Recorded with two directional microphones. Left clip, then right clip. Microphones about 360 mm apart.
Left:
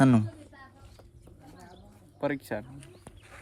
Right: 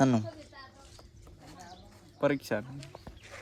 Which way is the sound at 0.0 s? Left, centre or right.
Centre.